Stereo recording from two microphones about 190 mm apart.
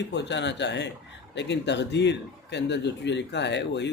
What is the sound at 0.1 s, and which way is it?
Speech, 65° left (ahead or behind).